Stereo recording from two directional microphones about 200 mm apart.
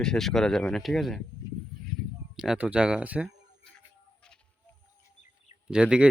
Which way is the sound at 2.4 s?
5° right (ahead or behind).